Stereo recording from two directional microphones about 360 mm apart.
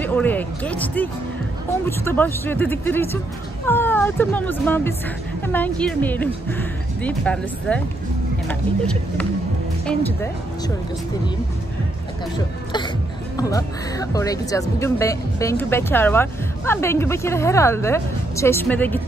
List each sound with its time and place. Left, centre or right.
0.0 s speech: centre
13.4 s speech: centre